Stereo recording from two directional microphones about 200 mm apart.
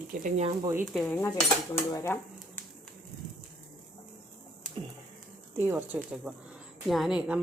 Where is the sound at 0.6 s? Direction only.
10° right (ahead or behind).